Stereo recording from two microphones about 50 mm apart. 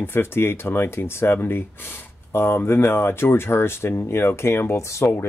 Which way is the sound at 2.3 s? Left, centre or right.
Left.